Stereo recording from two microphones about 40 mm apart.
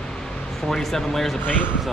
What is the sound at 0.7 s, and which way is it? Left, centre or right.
Speech, centre.